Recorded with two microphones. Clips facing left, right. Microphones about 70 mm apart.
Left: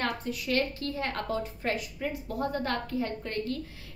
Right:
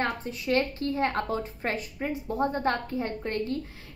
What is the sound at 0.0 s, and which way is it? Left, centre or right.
A woman's voice, right.